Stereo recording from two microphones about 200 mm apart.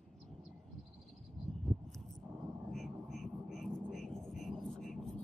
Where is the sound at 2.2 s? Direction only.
Centre (ahead or behind).